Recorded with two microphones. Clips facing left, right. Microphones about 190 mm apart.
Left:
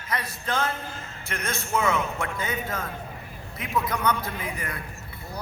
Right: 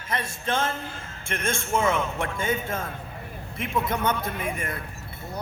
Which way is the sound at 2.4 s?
25° right (ahead or behind).